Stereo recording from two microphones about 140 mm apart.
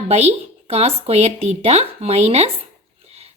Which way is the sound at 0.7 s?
45° right (ahead or behind).